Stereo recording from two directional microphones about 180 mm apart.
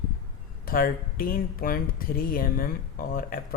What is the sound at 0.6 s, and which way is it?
Speech, 50° left (ahead or behind).